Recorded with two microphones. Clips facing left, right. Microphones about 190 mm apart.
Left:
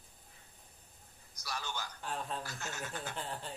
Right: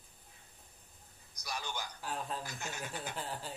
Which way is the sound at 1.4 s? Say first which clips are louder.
Even; 15° right (ahead or behind).